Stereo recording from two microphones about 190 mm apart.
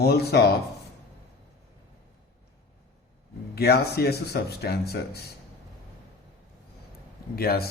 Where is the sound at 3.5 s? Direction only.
55° left (ahead or behind).